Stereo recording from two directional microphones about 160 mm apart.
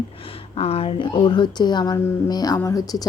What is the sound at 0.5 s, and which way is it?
A woman's voice, 35° left (ahead or behind).